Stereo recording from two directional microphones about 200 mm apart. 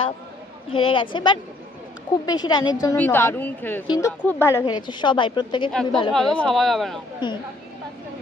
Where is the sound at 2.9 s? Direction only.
10° left (ahead or behind).